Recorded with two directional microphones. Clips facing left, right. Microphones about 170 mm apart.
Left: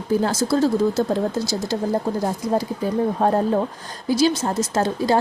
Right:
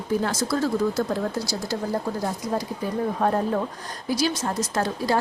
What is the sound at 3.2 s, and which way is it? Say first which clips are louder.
A woman's voice: left 3 dB; 30° left (ahead or behind).